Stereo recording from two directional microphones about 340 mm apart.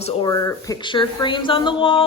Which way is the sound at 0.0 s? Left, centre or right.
Centre.